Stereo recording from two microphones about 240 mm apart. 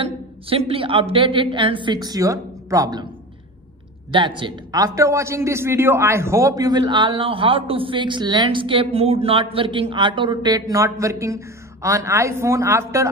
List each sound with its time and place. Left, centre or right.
0.5 s a woman's voice: right
4.4 s a man's voice: centre